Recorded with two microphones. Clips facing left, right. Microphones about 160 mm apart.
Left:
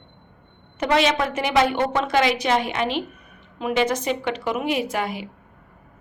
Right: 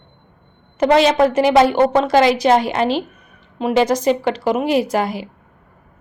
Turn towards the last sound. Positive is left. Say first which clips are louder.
# right 6 dB
turn(degrees=-35)  # may be behind; listen again after turning